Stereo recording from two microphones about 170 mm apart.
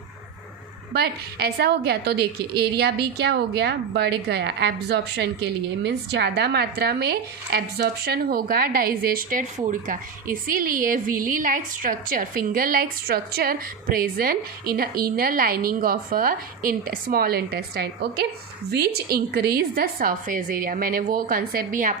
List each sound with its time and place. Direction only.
0.9 s a woman's voice: 70° right (ahead or behind)